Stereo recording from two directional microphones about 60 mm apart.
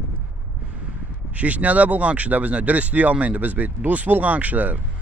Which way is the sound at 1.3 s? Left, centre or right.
Right.